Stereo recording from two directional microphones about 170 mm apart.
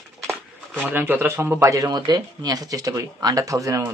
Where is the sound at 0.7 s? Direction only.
10° right (ahead or behind).